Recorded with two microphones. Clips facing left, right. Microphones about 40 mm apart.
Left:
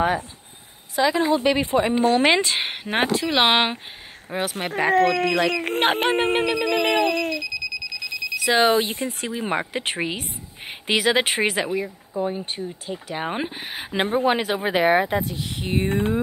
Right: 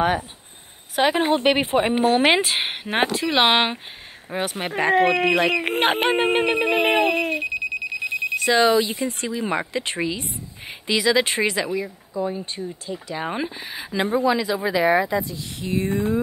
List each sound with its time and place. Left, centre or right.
0.9 s speech: right
2.0 s telephone bell ringing: centre
2.3 s speech: centre
5.0 s telephone bell ringing: centre
5.8 s speech: centre
6.6 s telephone bell ringing: centre
7.4 s alarm clock: right
8.5 s speech: centre
9.7 s speech: left
13.2 s speech: centre
13.7 s speech: left